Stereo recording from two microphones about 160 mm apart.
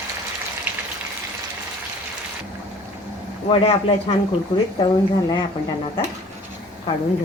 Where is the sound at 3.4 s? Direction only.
35° left (ahead or behind).